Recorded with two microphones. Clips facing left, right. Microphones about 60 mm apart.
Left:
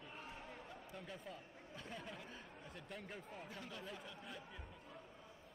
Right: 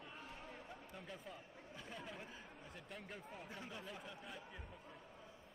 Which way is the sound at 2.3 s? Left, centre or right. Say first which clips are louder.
Left 1 dB; centre.